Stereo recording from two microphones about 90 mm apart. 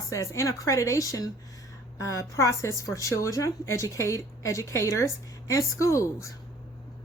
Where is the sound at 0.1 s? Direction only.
35° left (ahead or behind).